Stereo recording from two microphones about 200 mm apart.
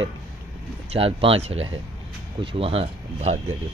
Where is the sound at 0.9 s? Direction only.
30° right (ahead or behind).